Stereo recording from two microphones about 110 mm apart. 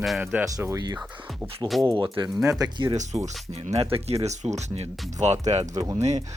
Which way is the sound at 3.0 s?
90° right.